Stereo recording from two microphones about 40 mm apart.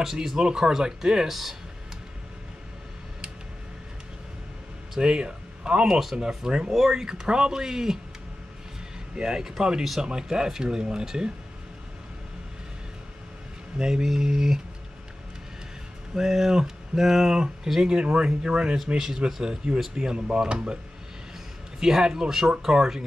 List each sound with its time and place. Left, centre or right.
0.0 s speech: centre
0.4 s speech: centre
4.9 s speech: right
9.1 s speech: centre
13.7 s speech: centre
16.2 s speech: centre
17.8 s speech: right
18.9 s a man's voice: centre